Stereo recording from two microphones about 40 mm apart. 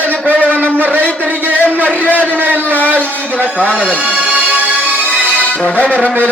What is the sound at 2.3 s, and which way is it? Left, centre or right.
A man's voice, right.